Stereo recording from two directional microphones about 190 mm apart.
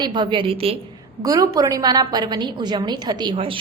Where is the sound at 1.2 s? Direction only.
20° right (ahead or behind).